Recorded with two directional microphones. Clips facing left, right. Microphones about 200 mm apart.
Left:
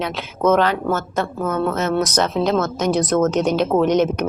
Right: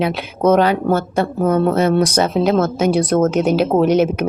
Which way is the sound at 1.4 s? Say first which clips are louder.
Right 7 dB; 35° right (ahead or behind).